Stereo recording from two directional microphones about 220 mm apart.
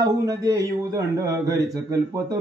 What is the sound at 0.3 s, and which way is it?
Speech, 15° right (ahead or behind).